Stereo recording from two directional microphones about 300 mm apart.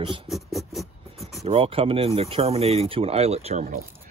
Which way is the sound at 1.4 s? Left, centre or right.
Centre.